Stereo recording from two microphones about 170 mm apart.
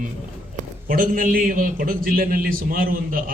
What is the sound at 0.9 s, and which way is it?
A man's voice, 55° right (ahead or behind).